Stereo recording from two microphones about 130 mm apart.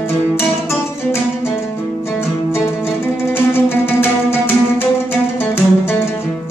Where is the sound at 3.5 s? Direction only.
15° left (ahead or behind).